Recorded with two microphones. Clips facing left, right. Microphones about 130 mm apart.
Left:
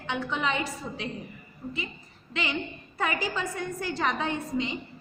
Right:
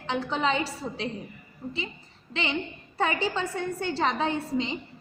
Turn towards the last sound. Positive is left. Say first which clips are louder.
# right 2 dB
turn(degrees=-30)  # may be behind; listen again after turning